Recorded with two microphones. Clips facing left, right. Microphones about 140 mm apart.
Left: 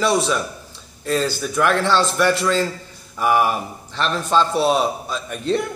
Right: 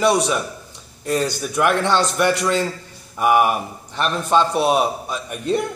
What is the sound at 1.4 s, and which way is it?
A man's voice, 10° right (ahead or behind).